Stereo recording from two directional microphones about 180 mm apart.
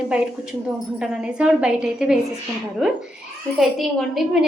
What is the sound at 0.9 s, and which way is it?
A woman's voice, 5° right (ahead or behind).